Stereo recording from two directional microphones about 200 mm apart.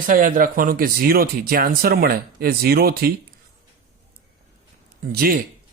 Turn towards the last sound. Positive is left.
turn(degrees=-50)  # may be behind; listen again after turning